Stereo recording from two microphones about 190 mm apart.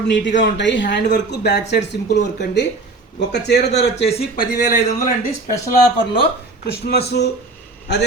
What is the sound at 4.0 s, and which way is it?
Speech, 35° left (ahead or behind).